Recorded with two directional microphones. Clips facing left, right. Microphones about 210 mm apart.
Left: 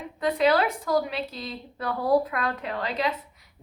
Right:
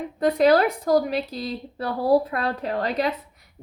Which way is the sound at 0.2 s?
45° right (ahead or behind).